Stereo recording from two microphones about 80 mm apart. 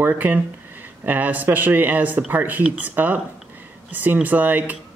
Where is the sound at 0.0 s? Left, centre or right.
Right.